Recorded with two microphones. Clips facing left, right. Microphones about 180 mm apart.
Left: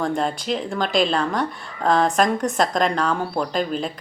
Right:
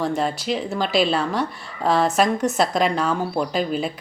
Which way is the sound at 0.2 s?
5° right (ahead or behind).